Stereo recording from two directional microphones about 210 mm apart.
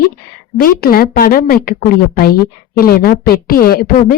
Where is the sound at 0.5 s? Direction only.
45° left (ahead or behind).